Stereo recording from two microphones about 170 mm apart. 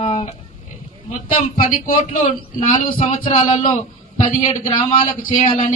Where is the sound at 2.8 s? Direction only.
45° left (ahead or behind).